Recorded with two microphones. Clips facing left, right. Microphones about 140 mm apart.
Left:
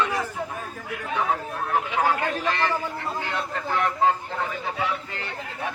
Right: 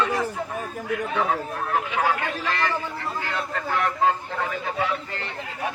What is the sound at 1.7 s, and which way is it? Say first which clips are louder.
Speech: left 1 dB; 15° left (ahead or behind).